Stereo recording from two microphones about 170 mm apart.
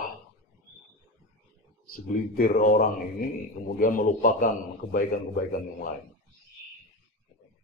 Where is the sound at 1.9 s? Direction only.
55° left (ahead or behind).